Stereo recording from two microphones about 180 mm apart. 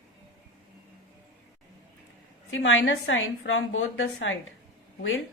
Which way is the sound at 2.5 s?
90° left.